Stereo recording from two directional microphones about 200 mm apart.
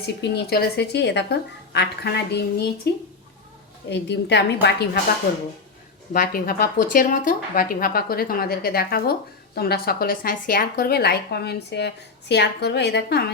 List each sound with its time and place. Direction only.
0.0 s a woman's voice: 55° left (ahead or behind)
6.1 s speech: 45° left (ahead or behind)